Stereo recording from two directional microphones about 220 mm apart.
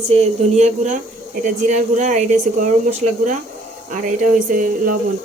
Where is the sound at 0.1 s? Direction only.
30° right (ahead or behind).